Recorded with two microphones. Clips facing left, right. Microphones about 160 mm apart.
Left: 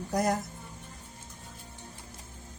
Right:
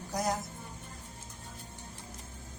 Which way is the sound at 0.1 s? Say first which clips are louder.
Left 4 dB; 60° left (ahead or behind).